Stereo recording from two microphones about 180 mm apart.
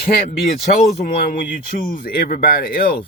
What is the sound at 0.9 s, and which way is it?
Speech, 50° left (ahead or behind).